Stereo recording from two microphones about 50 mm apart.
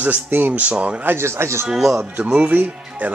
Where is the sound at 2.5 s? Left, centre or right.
Right.